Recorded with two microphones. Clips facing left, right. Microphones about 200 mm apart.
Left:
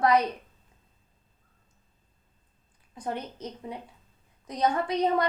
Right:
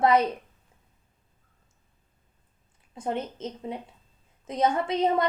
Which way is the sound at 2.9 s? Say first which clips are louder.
Right 3 dB; 25° right (ahead or behind).